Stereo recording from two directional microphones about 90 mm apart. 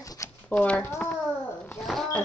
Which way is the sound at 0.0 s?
40° left (ahead or behind).